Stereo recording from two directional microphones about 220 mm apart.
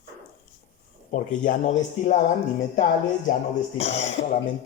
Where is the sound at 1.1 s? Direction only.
35° left (ahead or behind).